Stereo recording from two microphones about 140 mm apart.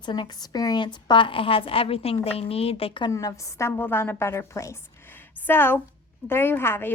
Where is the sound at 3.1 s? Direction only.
25° left (ahead or behind).